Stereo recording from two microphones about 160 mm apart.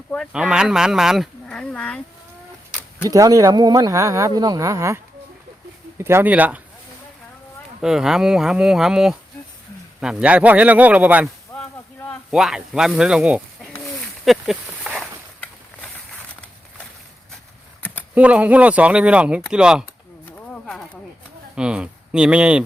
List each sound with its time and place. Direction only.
0.3 s speech: 5° right (ahead or behind)
3.1 s speech: 20° right (ahead or behind)
6.0 s a man's voice: 15° right (ahead or behind)
7.8 s a man's voice: 5° right (ahead or behind)
12.3 s speech: 5° right (ahead or behind)
14.3 s a sound: 5° right (ahead or behind)
18.1 s a man's voice: 10° right (ahead or behind)
20.5 s a sound: 5° left (ahead or behind)
21.5 s speech: 5° right (ahead or behind)